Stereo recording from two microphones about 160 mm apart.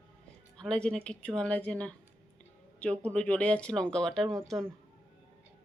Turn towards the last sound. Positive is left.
turn(degrees=0)  # may be behind; listen again after turning